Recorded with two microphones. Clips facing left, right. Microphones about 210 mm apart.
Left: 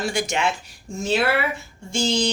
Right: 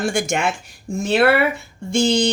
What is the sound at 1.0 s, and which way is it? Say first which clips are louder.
Speech: right 5 dB; 60° right (ahead or behind).